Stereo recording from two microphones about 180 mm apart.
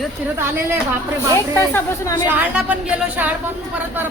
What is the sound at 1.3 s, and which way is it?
Speech, 15° left (ahead or behind).